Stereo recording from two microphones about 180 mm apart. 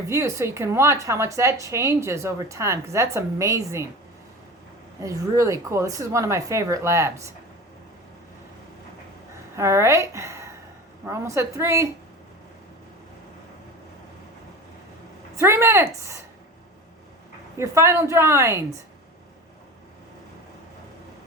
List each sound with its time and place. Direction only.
0.1 s a woman's voice: 15° right (ahead or behind)
4.9 s a woman's voice: 15° right (ahead or behind)
9.6 s a woman's voice: 15° right (ahead or behind)
15.4 s a woman's voice: 15° right (ahead or behind)
17.6 s a woman's voice: 15° right (ahead or behind)